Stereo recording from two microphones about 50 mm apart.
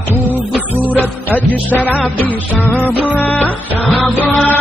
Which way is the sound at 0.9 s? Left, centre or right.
Left.